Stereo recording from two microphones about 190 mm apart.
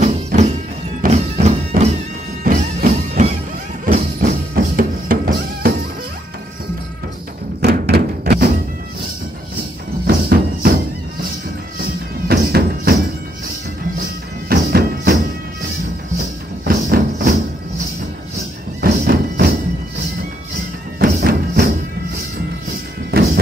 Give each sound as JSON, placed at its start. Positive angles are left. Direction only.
{"t": 0.0, "sound": "music", "side_deg": -40}
{"t": 7.6, "sound": "thump", "side_deg": -55}
{"t": 10.0, "sound": "music", "side_deg": -55}
{"t": 12.3, "sound": "music", "side_deg": -55}
{"t": 14.5, "sound": "music", "side_deg": -55}
{"t": 16.6, "sound": "music", "side_deg": -50}
{"t": 18.8, "sound": "music", "side_deg": -55}
{"t": 21.0, "sound": "music", "side_deg": -55}